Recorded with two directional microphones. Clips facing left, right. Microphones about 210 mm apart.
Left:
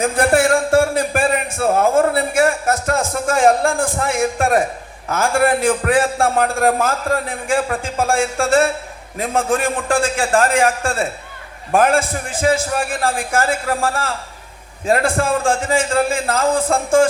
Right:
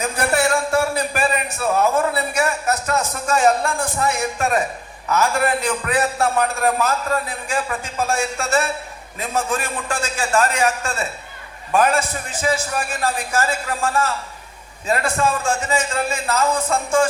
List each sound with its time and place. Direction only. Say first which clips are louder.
0.0 s music: left 5 dB; 50° left (ahead or behind)
5.0 s a man's voice: left 3 dB; 50° left (ahead or behind)